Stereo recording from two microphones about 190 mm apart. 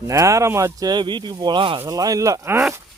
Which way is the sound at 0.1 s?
15° right (ahead or behind).